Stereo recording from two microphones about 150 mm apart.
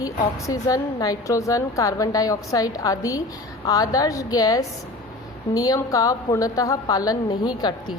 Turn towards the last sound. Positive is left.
turn(degrees=30)  # may be behind; listen again after turning